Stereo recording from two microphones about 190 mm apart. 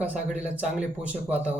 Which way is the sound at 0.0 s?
5° right (ahead or behind).